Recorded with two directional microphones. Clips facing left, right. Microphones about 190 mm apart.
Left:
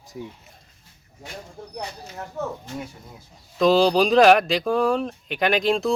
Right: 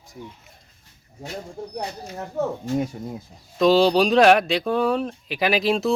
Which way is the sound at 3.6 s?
Centre (ahead or behind).